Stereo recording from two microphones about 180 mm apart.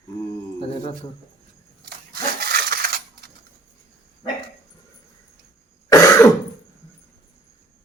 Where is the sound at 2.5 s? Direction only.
55° right (ahead or behind).